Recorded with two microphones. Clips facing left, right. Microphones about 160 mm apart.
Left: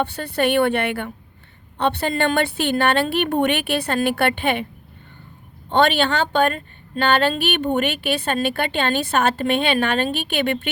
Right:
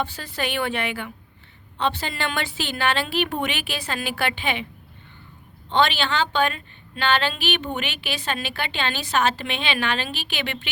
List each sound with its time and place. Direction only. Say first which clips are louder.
0.0 s a woman's voice: left 7 dB; 60° left (ahead or behind)
5.6 s a woman's voice: left 4 dB; 55° left (ahead or behind)